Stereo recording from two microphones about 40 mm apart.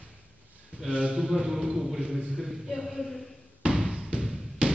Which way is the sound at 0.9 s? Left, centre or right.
Right.